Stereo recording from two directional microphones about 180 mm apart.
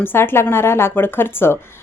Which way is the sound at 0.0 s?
10° left (ahead or behind).